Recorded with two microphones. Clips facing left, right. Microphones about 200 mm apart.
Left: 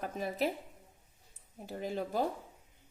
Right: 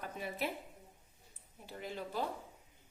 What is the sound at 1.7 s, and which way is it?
Speech, 45° left (ahead or behind).